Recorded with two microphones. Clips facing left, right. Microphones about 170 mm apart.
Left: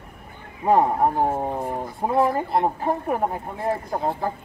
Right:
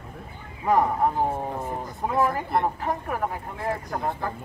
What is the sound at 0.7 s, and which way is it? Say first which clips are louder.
Speech: left 3 dB; 25° left (ahead or behind).